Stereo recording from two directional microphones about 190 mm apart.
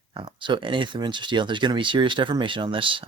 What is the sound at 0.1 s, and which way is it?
Speech, 25° right (ahead or behind).